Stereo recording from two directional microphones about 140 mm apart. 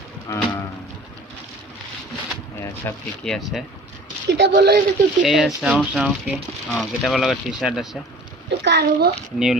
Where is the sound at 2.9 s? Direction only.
20° left (ahead or behind).